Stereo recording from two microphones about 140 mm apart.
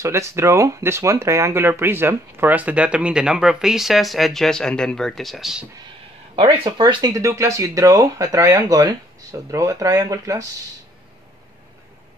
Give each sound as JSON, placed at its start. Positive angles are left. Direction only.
{"t": 0.0, "sound": "speech", "side_deg": -20}
{"t": 6.3, "sound": "speech", "side_deg": -35}